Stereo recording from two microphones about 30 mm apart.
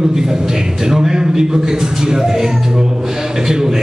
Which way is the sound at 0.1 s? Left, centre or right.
Centre.